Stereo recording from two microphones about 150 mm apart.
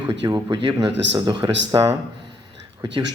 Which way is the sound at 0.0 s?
30° right (ahead or behind).